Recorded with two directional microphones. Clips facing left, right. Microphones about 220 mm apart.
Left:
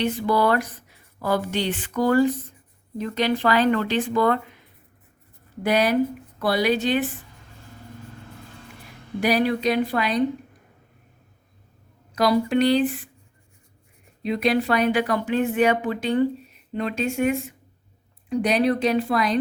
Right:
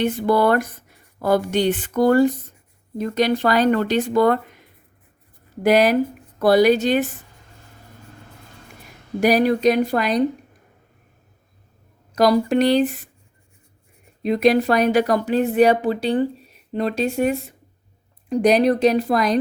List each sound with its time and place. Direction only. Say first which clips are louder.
0.0 s speech: right 3 dB; 55° right (ahead or behind)
6.4 s speech: right 7 dB; 45° right (ahead or behind)
9.2 s speech: right 5 dB; 45° right (ahead or behind)
12.1 s speech: right 3 dB; 40° right (ahead or behind)
14.2 s speech: right 5 dB; 45° right (ahead or behind)